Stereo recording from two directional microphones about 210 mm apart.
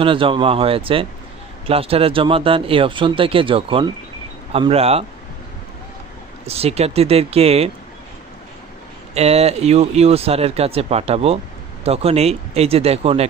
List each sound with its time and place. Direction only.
0.0 s speech: 25° right (ahead or behind)
6.4 s speech: 30° right (ahead or behind)
9.1 s speech: 30° right (ahead or behind)